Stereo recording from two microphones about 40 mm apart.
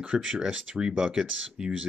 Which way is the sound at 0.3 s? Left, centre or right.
Centre.